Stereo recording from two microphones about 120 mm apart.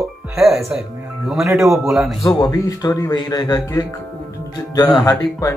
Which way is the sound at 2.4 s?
35° left (ahead or behind).